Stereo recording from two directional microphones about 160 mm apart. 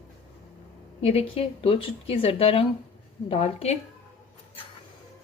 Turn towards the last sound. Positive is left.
turn(degrees=40)  # may be behind; listen again after turning